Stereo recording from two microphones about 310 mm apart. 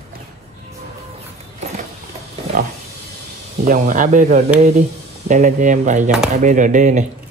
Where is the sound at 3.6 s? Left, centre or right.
Right.